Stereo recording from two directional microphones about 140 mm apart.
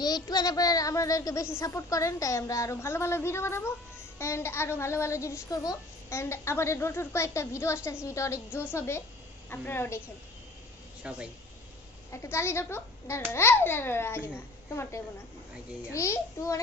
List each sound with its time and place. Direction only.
0.0 s a child's voice: 30° left (ahead or behind)
11.0 s speech: 10° right (ahead or behind)
12.1 s a child's voice: 20° left (ahead or behind)